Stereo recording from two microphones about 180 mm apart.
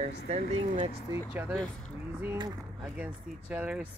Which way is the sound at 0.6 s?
35° right (ahead or behind).